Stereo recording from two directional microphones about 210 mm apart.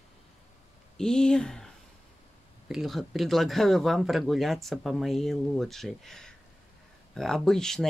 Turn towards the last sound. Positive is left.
turn(degrees=0)  # may be behind; listen again after turning